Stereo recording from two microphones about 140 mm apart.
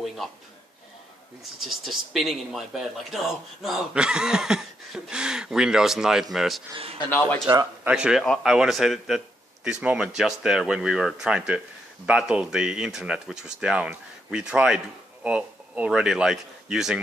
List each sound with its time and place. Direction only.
0.0 s speech: centre (ahead or behind)
1.6 s speech: centre (ahead or behind)
6.7 s a man's voice: 40° right (ahead or behind)
7.1 s speech: 10° left (ahead or behind)
7.8 s speech: 5° right (ahead or behind)